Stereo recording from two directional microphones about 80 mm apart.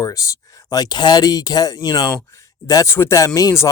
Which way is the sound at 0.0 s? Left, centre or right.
Left.